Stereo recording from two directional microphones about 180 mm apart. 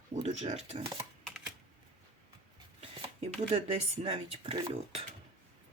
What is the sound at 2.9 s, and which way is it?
Shuffling cards, 30° right (ahead or behind).